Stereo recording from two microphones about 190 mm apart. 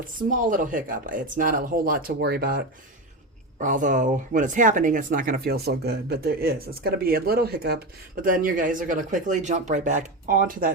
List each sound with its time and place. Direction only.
0.2 s speech: 45° right (ahead or behind)